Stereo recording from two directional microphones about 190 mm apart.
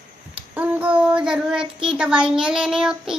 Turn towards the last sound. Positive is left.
turn(degrees=-5)  # may be behind; listen again after turning